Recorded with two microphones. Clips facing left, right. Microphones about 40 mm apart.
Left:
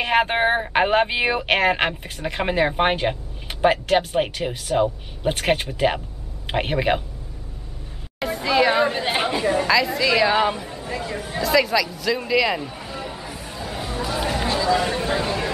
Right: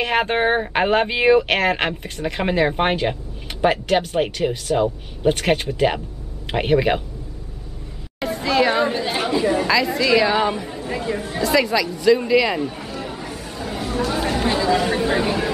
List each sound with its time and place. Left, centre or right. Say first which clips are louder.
0.0 s a woman's voice: even; centre
8.2 s a sound: right 1 dB; centre
8.9 s speech: right 1 dB; centre
9.4 s a woman's voice: right 1 dB; centre
13.0 s chatter: right 2 dB; centre
14.8 s a sound: right 3 dB; centre